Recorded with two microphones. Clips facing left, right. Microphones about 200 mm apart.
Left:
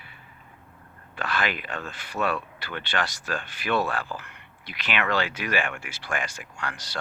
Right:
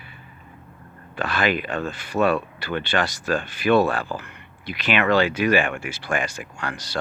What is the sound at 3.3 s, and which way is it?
Speech, 15° right (ahead or behind).